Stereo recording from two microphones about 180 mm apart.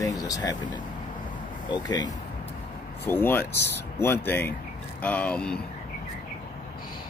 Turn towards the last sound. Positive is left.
turn(degrees=5)  # may be behind; listen again after turning